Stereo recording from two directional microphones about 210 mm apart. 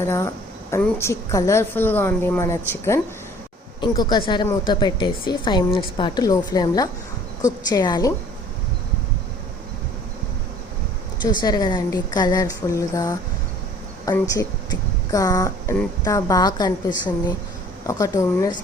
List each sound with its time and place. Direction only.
0.1 s a woman's voice: 15° left (ahead or behind)
11.2 s a woman's voice: 20° left (ahead or behind)
17.8 s a woman's voice: 15° left (ahead or behind)